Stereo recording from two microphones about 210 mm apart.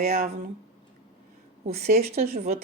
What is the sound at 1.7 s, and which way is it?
Speech, 45° right (ahead or behind).